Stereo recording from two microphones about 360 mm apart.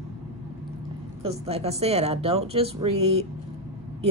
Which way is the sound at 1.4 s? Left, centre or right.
Centre.